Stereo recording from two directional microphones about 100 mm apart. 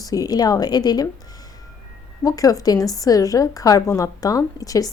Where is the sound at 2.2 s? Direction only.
35° left (ahead or behind).